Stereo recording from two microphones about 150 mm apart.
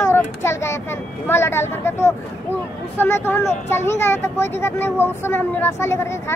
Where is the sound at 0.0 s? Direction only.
15° left (ahead or behind).